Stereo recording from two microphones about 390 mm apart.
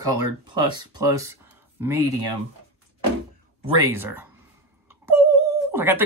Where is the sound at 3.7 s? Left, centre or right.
Right.